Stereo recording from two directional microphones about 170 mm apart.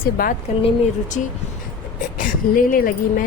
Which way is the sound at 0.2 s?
60° left (ahead or behind).